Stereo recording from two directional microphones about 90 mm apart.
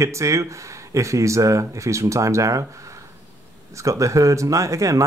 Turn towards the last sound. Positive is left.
turn(degrees=-35)  # may be behind; listen again after turning